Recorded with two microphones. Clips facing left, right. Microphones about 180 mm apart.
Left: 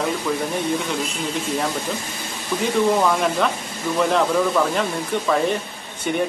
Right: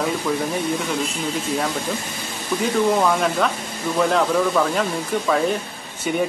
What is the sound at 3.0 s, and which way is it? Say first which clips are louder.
Speech: even; centre (ahead or behind).